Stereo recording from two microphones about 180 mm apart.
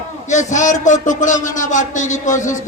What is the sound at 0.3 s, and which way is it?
A man's voice, 40° left (ahead or behind).